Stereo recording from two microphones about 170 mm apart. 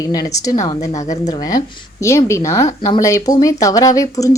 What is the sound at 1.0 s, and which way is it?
Speech, 45° left (ahead or behind).